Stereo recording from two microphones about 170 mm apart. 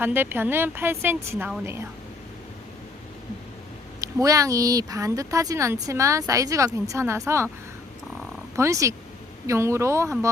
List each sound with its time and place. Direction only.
0.0 s speech: 10° right (ahead or behind)
4.0 s speech: 20° right (ahead or behind)
8.5 s speech: 20° right (ahead or behind)